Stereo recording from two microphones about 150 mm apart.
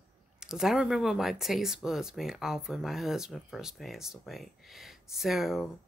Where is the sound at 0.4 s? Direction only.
5° right (ahead or behind).